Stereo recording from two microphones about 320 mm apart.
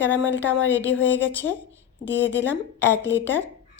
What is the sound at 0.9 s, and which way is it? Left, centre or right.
Speech, left.